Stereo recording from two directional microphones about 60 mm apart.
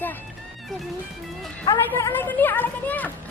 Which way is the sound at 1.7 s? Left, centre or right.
Left.